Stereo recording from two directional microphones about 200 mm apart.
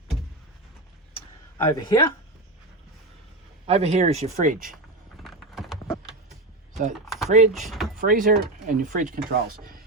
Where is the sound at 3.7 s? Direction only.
30° right (ahead or behind).